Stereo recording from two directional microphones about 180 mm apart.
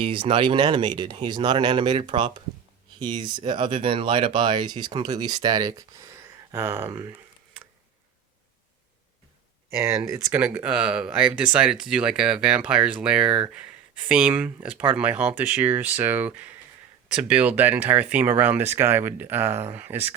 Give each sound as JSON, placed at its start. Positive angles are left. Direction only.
{"t": 0.0, "sound": "speech", "side_deg": -30}
{"t": 9.6, "sound": "speech", "side_deg": -15}